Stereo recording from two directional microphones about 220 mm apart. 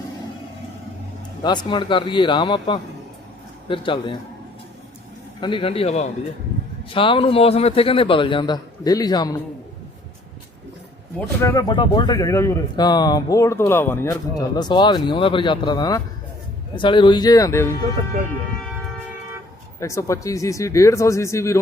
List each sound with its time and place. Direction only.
1.4 s a man's voice: 20° left (ahead or behind)
5.4 s a man's voice: 25° left (ahead or behind)
11.4 s a man's voice: 20° left (ahead or behind)
19.8 s speech: 15° left (ahead or behind)